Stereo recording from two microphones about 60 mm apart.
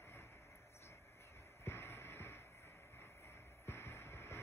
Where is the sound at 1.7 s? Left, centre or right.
Left.